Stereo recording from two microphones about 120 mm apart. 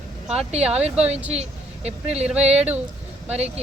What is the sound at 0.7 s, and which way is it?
Speech, 60° right (ahead or behind).